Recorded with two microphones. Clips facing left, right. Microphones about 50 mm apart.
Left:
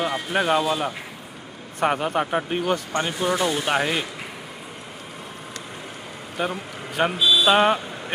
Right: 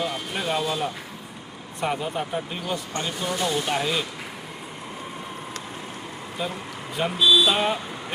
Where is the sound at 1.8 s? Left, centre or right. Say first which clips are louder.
Left 5 dB; left.